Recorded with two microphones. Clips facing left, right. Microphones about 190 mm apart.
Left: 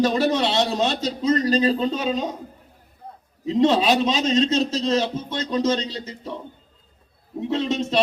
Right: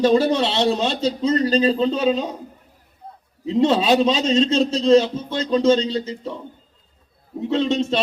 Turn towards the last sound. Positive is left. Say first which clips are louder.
# right 4 dB
turn(degrees=-25)  # may be behind; listen again after turning